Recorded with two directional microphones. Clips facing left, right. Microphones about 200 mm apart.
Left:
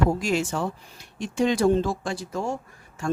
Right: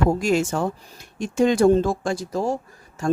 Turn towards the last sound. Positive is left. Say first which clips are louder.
# right 4 dB
turn(degrees=-35)  # may be behind; listen again after turning